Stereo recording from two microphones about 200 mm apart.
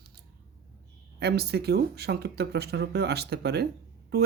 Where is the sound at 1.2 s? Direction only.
55° right (ahead or behind).